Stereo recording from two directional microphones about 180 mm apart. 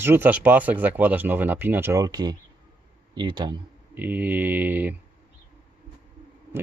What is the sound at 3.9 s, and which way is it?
Speech, 10° right (ahead or behind).